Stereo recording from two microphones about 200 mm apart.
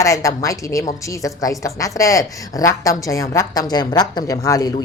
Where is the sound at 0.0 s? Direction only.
15° left (ahead or behind).